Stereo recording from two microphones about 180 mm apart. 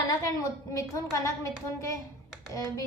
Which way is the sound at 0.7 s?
15° left (ahead or behind).